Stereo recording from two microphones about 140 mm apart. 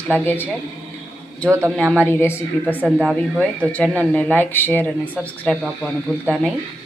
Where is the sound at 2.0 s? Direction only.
15° left (ahead or behind).